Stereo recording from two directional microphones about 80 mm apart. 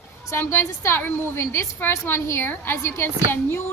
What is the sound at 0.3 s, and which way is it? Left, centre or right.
A woman's voice, left.